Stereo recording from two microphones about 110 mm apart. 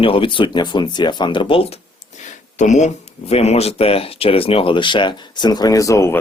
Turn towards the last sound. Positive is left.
turn(degrees=30)  # may be behind; listen again after turning